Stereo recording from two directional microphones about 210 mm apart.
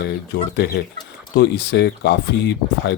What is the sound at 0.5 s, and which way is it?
Speech, 50° left (ahead or behind).